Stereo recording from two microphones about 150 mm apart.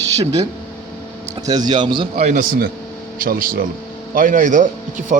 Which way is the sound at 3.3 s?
70° right (ahead or behind).